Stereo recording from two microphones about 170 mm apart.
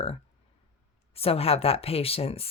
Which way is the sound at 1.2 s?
35° left (ahead or behind).